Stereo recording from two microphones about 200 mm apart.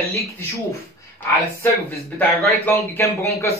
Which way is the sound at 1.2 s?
10° left (ahead or behind).